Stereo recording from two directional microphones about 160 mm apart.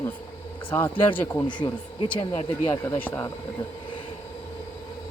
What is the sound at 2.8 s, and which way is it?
Speech, 15° left (ahead or behind).